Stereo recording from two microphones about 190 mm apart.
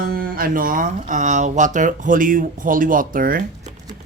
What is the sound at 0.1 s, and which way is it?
Speech, 50° right (ahead or behind).